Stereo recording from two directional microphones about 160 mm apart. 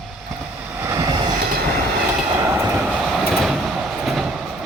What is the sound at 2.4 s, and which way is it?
Train, 15° right (ahead or behind).